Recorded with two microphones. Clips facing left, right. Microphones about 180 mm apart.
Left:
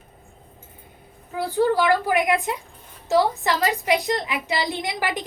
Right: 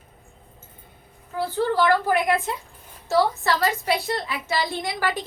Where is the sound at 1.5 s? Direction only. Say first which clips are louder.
Left 2 dB; 15° left (ahead or behind).